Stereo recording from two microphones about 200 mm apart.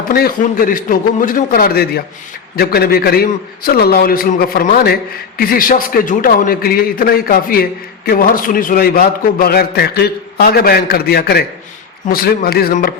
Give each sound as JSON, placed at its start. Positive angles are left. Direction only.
{"t": 0.1, "sound": "a man's voice", "side_deg": 45}